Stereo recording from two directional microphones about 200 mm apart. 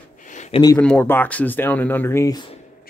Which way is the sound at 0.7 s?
5° left (ahead or behind).